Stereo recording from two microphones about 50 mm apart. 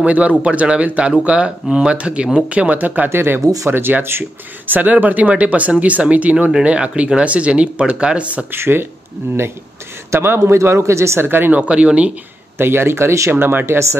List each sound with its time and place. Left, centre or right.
0.0 s speech: right
3.1 s speech: right
4.2 s speech: right
8.5 s speech: right
10.1 s speech: right
10.4 s speech: right
11.2 s speech: right
11.5 s speech: right
12.5 s speech: right
13.3 s speech: right